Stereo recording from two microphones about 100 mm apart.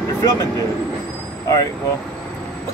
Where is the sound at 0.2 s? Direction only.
35° left (ahead or behind).